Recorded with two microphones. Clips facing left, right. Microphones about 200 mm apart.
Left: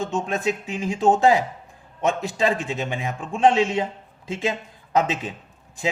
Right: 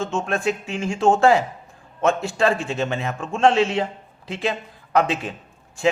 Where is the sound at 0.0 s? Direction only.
15° left (ahead or behind).